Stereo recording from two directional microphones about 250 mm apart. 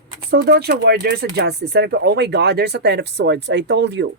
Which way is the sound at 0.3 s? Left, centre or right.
Right.